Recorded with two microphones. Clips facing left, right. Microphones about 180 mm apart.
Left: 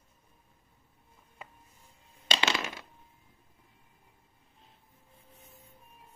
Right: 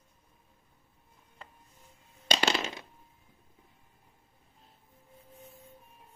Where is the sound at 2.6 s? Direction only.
20° right (ahead or behind).